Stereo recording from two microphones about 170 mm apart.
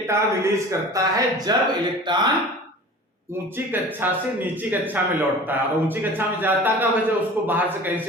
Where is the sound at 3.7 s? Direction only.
10° right (ahead or behind).